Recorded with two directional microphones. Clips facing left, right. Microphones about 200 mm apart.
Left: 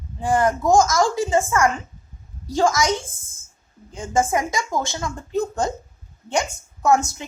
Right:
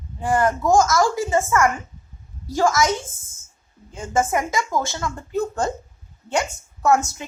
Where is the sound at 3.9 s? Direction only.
15° left (ahead or behind).